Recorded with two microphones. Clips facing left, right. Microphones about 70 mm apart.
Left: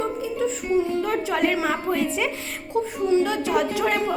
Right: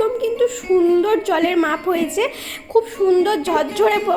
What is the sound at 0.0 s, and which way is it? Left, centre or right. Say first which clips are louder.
Music: right 8 dB; right.